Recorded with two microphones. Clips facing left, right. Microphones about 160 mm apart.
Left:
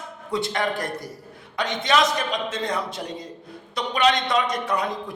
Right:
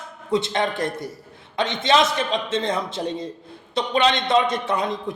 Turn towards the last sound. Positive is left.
turn(degrees=-25)  # may be behind; listen again after turning